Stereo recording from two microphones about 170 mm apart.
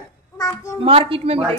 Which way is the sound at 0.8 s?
30° right (ahead or behind).